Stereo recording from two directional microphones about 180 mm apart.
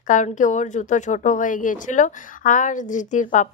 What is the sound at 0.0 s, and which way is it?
Speech, 45° left (ahead or behind).